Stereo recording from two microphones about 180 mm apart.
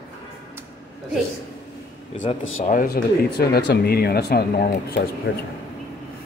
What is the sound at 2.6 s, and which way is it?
Speech, 55° left (ahead or behind).